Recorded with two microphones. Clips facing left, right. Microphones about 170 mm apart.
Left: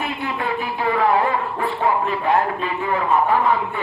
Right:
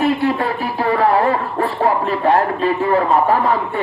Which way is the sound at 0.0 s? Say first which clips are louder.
Right 9 dB; 40° right (ahead or behind).